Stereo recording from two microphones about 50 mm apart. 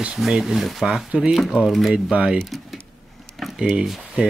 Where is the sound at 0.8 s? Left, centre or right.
Centre.